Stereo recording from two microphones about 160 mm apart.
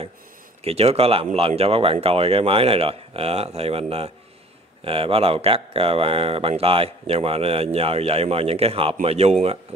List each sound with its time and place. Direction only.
0.7 s speech: 40° right (ahead or behind)